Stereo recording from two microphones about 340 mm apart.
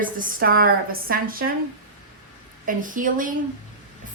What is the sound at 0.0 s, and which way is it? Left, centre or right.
A woman's voice, right.